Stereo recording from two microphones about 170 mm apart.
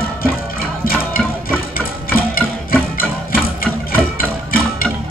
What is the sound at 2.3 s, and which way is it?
Music, 60° left (ahead or behind).